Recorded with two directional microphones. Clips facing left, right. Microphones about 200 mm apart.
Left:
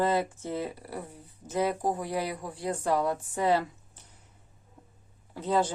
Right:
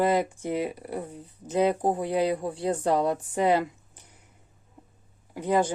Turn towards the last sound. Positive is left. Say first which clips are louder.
# right 3 dB
turn(degrees=-15)  # may be behind; listen again after turning